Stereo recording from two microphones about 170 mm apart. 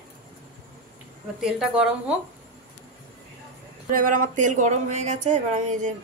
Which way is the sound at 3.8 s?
50° right (ahead or behind).